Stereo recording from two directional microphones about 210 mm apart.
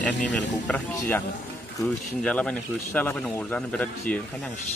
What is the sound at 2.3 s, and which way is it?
Speech, 5° left (ahead or behind).